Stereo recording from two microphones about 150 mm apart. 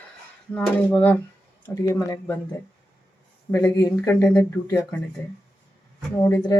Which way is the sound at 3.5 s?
15° left (ahead or behind).